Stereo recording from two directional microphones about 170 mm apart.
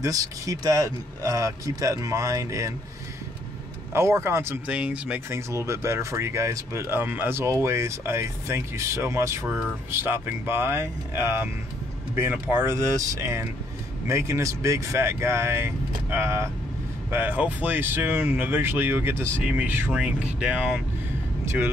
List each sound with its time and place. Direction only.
0.0 s speech: 20° right (ahead or behind)
3.9 s speech: 15° right (ahead or behind)